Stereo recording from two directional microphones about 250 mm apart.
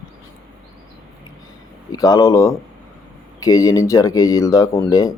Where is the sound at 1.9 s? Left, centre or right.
Centre.